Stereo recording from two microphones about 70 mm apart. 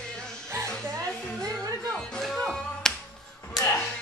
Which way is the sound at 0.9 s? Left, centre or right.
Right.